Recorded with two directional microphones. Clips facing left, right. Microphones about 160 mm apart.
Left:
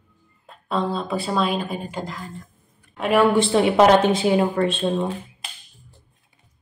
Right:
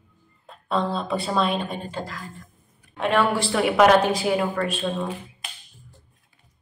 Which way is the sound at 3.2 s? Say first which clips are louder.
Left 8 dB; 20° left (ahead or behind).